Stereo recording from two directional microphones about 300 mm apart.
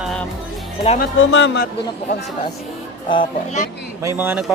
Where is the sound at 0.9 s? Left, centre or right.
Left.